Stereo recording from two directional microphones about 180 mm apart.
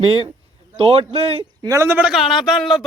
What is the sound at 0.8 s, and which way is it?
Speech, 30° right (ahead or behind).